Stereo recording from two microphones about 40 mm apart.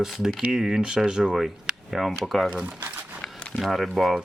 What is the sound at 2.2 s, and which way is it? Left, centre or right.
Speech, centre.